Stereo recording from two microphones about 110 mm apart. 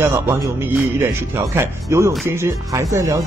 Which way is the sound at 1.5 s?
25° right (ahead or behind).